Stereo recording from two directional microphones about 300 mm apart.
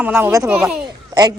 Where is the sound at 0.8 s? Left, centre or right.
Centre.